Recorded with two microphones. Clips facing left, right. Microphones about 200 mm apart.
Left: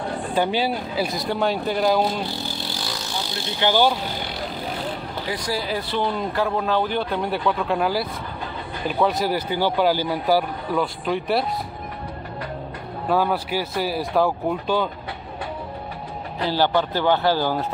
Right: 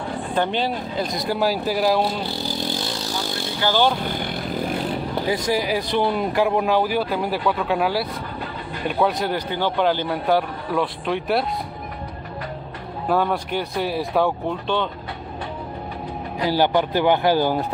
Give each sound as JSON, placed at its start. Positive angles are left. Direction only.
{"t": 0.3, "sound": "a man's voice", "side_deg": 5}
{"t": 3.6, "sound": "speech", "side_deg": 15}
{"t": 4.0, "sound": "vehicle", "side_deg": -50}
{"t": 5.3, "sound": "a man's voice", "side_deg": -20}
{"t": 13.1, "sound": "a man's voice", "side_deg": 0}
{"t": 16.3, "sound": "speech", "side_deg": -15}